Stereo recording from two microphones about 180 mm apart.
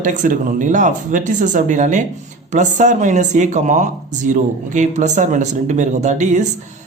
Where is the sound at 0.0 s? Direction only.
45° right (ahead or behind).